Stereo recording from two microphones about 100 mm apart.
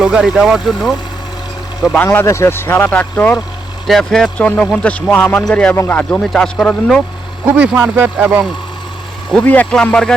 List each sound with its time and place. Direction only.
0.0 s speech: 5° right (ahead or behind)
2.0 s speech: 30° left (ahead or behind)
3.8 s speech: centre (ahead or behind)
7.4 s speech: 15° right (ahead or behind)
9.3 s speech: 15° left (ahead or behind)